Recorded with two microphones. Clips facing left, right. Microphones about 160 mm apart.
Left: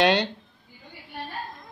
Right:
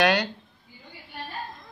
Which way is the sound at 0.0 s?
25° left (ahead or behind).